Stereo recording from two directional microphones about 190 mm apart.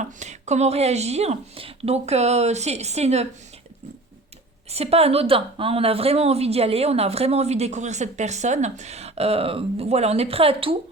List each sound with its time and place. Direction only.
0.0 s a woman's voice: 40° right (ahead or behind)
4.7 s a woman's voice: 30° right (ahead or behind)